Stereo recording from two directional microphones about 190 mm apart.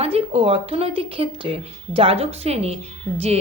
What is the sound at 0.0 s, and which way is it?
Speech, 30° right (ahead or behind).